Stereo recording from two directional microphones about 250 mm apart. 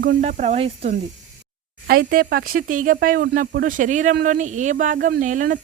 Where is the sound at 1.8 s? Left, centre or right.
Right.